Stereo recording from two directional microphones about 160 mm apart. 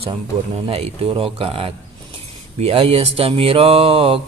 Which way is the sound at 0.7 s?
35° right (ahead or behind).